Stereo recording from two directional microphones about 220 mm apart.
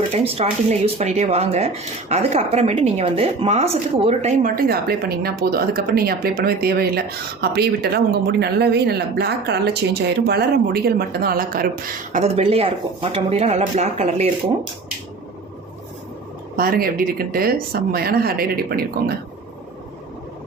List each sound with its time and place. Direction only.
0.1 s speech: 30° right (ahead or behind)
12.1 s speech: 30° right (ahead or behind)
16.6 s speech: 40° right (ahead or behind)